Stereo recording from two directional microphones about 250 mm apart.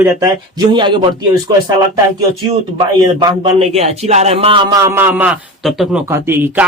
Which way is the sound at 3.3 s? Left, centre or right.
Right.